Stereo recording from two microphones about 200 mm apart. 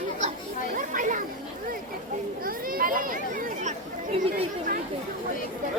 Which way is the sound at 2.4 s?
45° right (ahead or behind).